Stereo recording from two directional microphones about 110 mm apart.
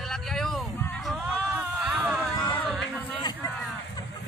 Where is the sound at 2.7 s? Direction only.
5° left (ahead or behind).